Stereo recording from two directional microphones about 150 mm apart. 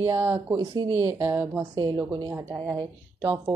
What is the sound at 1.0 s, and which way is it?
A woman's voice, 20° right (ahead or behind).